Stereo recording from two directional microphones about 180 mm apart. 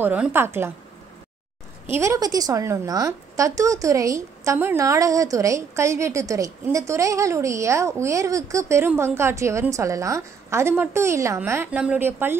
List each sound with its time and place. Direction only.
0.0 s a woman's voice: 10° right (ahead or behind)
1.9 s a woman's voice: 15° right (ahead or behind)